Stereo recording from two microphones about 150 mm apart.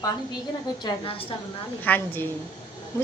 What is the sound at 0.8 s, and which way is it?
Speech, 35° left (ahead or behind).